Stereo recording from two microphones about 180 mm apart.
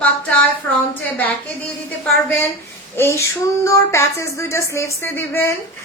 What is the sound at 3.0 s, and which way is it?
A woman's voice, 15° left (ahead or behind).